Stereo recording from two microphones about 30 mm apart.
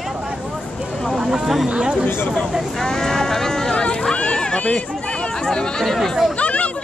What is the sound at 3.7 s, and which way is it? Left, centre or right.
Run, left.